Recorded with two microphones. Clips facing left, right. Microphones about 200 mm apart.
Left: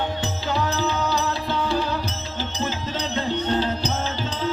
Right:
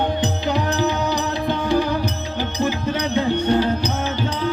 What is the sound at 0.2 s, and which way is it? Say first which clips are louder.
Music: right 4 dB; 15° right (ahead or behind).